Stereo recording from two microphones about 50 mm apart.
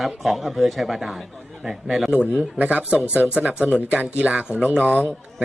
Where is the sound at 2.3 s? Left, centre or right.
Right.